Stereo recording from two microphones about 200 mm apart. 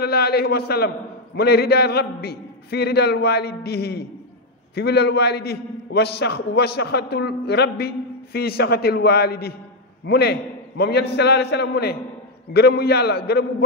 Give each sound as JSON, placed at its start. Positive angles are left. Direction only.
{"t": 0.0, "sound": "a man's voice", "side_deg": 55}